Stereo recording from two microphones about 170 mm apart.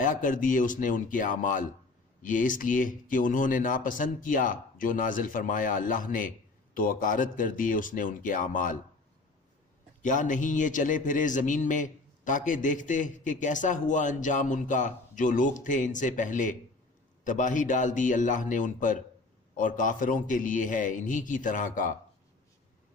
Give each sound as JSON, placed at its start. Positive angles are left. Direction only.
{"t": 0.0, "sound": "a man's voice", "side_deg": 50}
{"t": 10.0, "sound": "a man's voice", "side_deg": 50}